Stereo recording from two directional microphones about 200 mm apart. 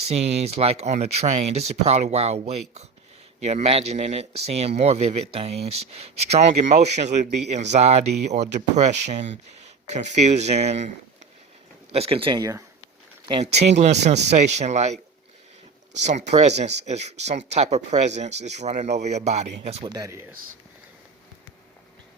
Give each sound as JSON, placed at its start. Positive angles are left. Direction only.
{"t": 0.1, "sound": "speech", "side_deg": -30}
{"t": 13.2, "sound": "speech", "side_deg": -30}
{"t": 16.3, "sound": "speech", "side_deg": -35}
{"t": 19.9, "sound": "speech", "side_deg": -15}